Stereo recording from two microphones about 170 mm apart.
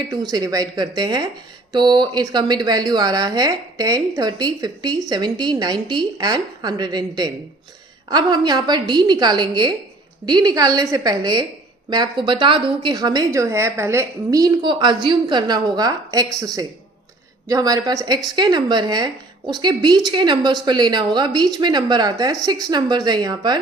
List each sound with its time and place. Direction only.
0.1 s speech: 25° right (ahead or behind)
17.5 s speech: 20° right (ahead or behind)